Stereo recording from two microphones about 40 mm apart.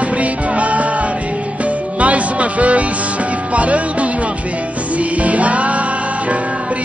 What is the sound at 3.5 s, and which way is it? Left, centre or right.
Music, right.